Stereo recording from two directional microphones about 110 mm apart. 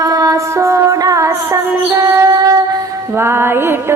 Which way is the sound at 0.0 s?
35° right (ahead or behind).